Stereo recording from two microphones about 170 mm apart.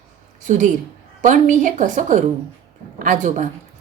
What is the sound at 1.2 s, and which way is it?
A woman's voice, 50° right (ahead or behind).